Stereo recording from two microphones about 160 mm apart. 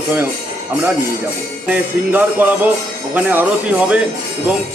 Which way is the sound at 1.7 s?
10° right (ahead or behind).